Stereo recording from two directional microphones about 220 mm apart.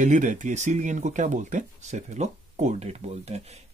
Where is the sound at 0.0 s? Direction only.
35° right (ahead or behind).